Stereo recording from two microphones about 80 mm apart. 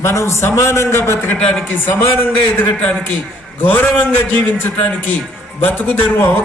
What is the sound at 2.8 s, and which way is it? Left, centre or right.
A man's voice, centre.